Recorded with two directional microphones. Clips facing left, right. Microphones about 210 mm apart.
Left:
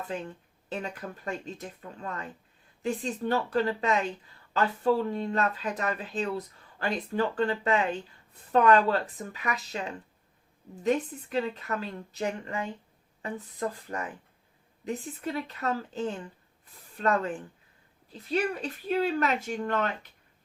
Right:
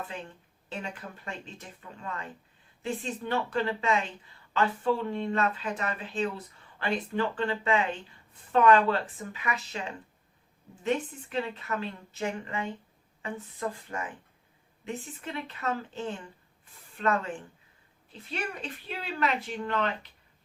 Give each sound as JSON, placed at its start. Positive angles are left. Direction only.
{"t": 0.7, "sound": "speech", "side_deg": 40}
{"t": 10.8, "sound": "speech", "side_deg": 40}
{"t": 18.3, "sound": "speech", "side_deg": 40}